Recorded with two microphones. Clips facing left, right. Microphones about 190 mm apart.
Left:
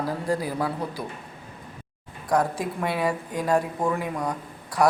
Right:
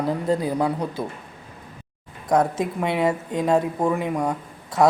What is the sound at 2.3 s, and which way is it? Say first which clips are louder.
Speech: right 3 dB; 20° right (ahead or behind).